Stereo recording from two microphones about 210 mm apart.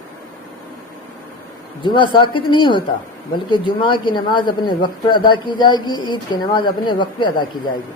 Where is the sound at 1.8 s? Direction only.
20° left (ahead or behind).